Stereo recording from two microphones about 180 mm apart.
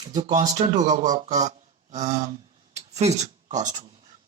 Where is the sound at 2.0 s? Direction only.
40° right (ahead or behind).